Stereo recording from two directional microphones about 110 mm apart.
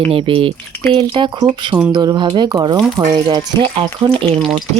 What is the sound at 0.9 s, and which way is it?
Speech, 45° right (ahead or behind).